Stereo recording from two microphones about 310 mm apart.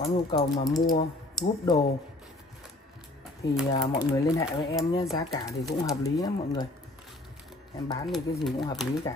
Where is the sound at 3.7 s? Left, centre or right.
Centre.